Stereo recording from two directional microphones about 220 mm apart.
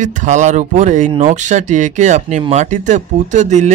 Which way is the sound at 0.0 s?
35° right (ahead or behind).